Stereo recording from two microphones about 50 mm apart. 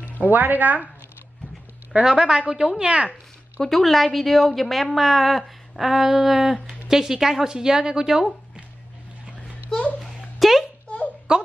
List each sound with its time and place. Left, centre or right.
0.3 s speech: right
2.0 s a woman's voice: centre
2.8 s speech: right
3.6 s a woman's voice: centre
10.0 s a sound: centre
11.3 s a sound: centre